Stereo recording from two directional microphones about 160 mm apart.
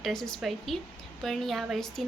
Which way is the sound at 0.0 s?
5° left (ahead or behind).